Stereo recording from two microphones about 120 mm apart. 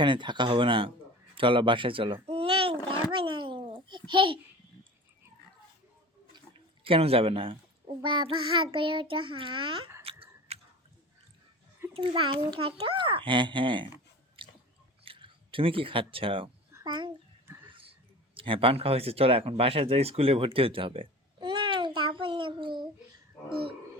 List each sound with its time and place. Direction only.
0.0 s a child's voice: 40° right (ahead or behind)
2.2 s babbling: 50° right (ahead or behind)
6.8 s a child's voice: 50° right (ahead or behind)
10.0 s chewing: 50° right (ahead or behind)
11.9 s a child's voice: 45° right (ahead or behind)
14.4 s biting: 45° right (ahead or behind)
15.0 s a child's voice: 45° right (ahead or behind)
17.7 s a sound: 50° right (ahead or behind)
18.3 s speech: 45° right (ahead or behind)